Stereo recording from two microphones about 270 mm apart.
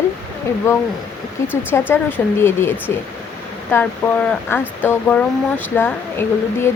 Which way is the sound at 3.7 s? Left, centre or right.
Centre.